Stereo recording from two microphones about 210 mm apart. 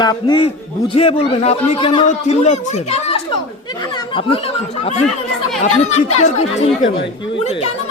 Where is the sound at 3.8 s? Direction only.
20° left (ahead or behind).